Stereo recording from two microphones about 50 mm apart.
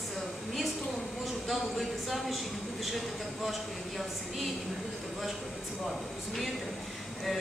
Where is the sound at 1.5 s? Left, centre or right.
Centre.